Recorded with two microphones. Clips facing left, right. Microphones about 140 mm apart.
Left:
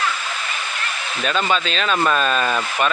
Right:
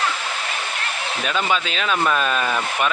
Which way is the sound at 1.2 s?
10° right (ahead or behind).